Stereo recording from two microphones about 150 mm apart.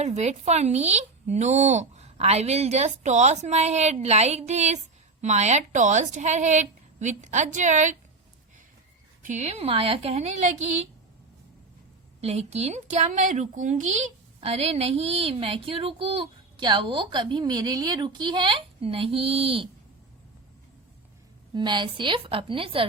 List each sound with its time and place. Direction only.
0.0 s speech: 50° right (ahead or behind)
9.2 s speech: 50° right (ahead or behind)
12.2 s a woman's voice: 45° right (ahead or behind)
21.5 s a woman's voice: 30° right (ahead or behind)